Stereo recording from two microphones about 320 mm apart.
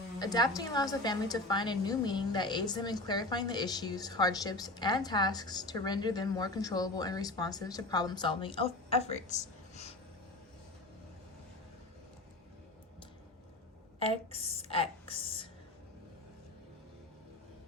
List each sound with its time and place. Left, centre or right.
0.2 s a woman's voice: centre
14.0 s a woman's voice: centre